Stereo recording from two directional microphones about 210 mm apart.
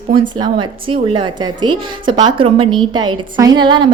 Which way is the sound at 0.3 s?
20° right (ahead or behind).